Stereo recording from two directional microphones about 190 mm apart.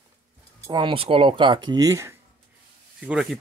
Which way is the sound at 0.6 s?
25° right (ahead or behind).